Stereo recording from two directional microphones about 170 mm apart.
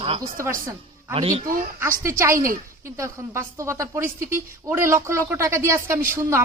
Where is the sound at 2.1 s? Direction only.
15° right (ahead or behind).